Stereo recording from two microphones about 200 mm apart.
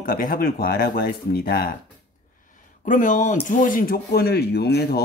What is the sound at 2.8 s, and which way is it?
Speech, 40° left (ahead or behind).